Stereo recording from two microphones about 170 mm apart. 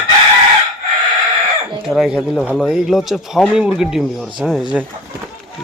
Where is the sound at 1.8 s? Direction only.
5° right (ahead or behind).